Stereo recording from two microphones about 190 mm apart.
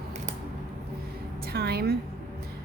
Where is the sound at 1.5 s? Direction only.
55° right (ahead or behind).